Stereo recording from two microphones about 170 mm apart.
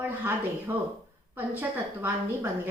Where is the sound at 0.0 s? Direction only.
15° right (ahead or behind).